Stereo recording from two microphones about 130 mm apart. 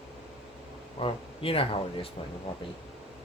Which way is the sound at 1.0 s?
45° left (ahead or behind).